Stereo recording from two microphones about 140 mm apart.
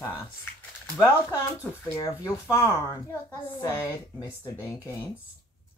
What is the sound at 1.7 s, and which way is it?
Speech, 15° left (ahead or behind).